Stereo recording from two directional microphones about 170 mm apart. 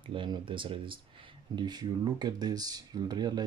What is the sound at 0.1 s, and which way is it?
Speech, 30° right (ahead or behind).